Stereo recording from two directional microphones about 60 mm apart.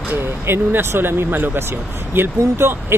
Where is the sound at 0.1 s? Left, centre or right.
Right.